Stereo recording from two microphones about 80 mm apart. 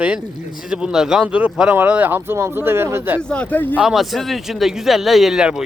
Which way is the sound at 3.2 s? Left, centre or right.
Centre.